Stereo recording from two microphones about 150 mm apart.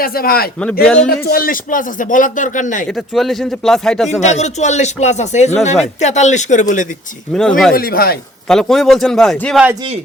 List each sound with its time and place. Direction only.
0.0 s a man's voice: 80° left
0.9 s a man's voice: 5° left (ahead or behind)
1.2 s a man's voice: 85° left; by 2.8 s 55° left (ahead or behind)
2.9 s speech: centre (ahead or behind)
4.2 s speech: 50° left (ahead or behind)
7.3 s speech: 5° left (ahead or behind)
7.8 s a man's voice: 85° left
8.4 s speech: 5° left (ahead or behind)